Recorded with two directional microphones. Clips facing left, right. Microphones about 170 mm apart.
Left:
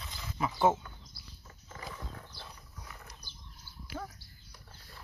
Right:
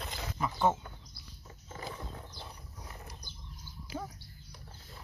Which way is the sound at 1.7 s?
25° right (ahead or behind).